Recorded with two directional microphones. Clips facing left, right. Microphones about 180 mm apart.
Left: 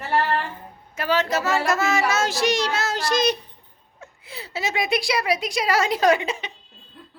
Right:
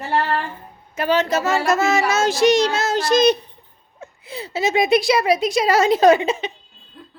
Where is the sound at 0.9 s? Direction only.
20° right (ahead or behind).